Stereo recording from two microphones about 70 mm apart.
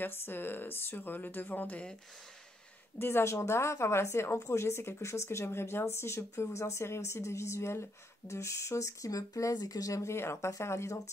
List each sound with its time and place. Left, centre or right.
0.0 s speech: left
3.0 s speech: left
10.1 s speech: left